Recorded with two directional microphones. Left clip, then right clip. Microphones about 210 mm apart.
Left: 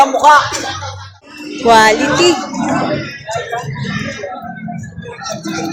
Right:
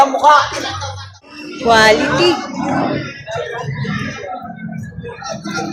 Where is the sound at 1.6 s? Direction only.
25° left (ahead or behind).